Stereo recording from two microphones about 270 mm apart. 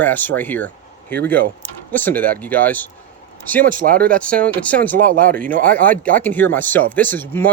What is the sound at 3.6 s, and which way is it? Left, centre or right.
Speech, right.